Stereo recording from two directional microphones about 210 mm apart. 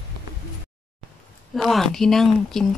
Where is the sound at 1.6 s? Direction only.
Centre (ahead or behind).